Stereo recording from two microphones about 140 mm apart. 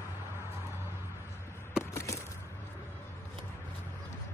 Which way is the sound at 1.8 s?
20° left (ahead or behind).